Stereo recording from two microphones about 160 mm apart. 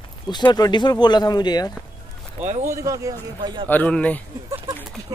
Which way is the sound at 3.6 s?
10° left (ahead or behind).